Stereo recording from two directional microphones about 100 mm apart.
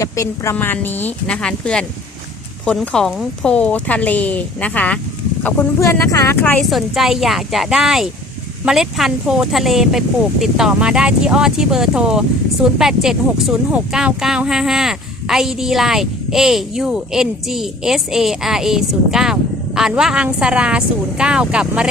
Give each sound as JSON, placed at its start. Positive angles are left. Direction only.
{"t": 0.0, "sound": "a woman's voice", "side_deg": 30}
{"t": 0.5, "sound": "speech", "side_deg": 20}
{"t": 2.8, "sound": "speech", "side_deg": 5}
{"t": 5.8, "sound": "speech", "side_deg": 30}
{"t": 6.7, "sound": "speech", "side_deg": 0}